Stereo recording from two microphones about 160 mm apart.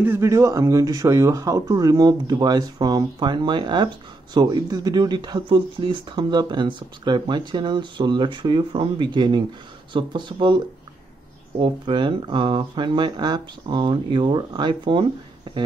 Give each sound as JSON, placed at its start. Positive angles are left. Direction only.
{"t": 0.0, "sound": "a man's voice", "side_deg": -15}
{"t": 11.6, "sound": "a man's voice", "side_deg": -30}